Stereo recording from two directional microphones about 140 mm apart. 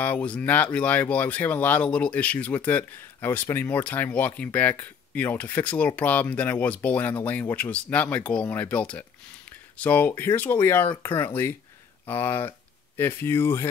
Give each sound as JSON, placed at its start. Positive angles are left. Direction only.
{"t": 0.0, "sound": "speech", "side_deg": 10}